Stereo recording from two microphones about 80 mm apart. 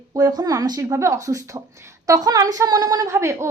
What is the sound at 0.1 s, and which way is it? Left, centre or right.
Speech, right.